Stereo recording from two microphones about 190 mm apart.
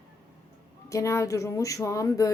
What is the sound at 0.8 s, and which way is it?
Speech, 15° left (ahead or behind).